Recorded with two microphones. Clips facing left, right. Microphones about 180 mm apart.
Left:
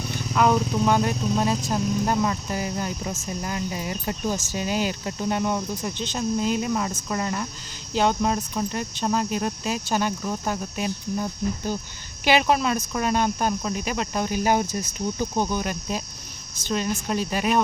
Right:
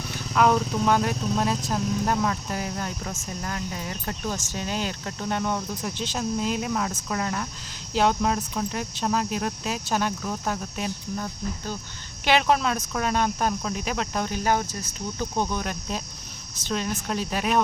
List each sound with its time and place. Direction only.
0.1 s speech: centre (ahead or behind)
5.8 s speech: 5° right (ahead or behind); by 11.8 s 15° left (ahead or behind)
12.2 s speech: 5° left (ahead or behind)